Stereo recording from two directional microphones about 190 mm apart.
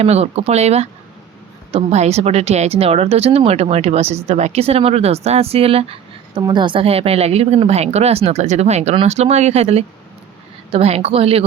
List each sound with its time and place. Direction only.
0.0 s speech: 35° right (ahead or behind)